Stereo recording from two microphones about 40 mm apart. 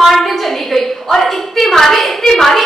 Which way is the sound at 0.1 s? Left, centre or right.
Centre.